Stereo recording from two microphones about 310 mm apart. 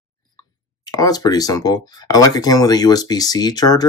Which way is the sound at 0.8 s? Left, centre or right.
Centre.